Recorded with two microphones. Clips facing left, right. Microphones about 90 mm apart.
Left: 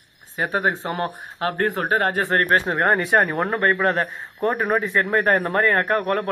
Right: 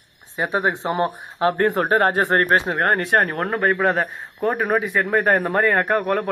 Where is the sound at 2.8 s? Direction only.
Centre (ahead or behind).